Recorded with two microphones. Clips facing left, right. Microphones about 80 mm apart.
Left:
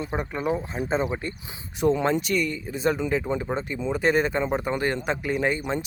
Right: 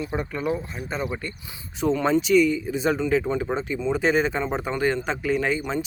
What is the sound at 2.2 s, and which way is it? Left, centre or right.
Speech, centre.